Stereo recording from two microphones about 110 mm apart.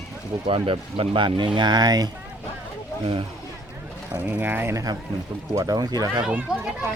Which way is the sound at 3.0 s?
50° right (ahead or behind).